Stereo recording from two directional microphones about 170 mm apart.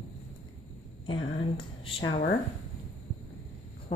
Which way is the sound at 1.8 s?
30° left (ahead or behind).